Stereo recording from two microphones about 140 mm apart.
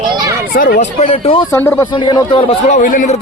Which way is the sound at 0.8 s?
50° left (ahead or behind).